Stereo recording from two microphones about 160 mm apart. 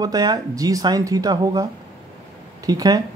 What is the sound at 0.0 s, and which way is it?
Speech, 25° right (ahead or behind).